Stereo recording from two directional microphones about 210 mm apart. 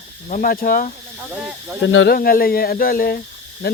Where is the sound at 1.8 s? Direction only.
65° left (ahead or behind).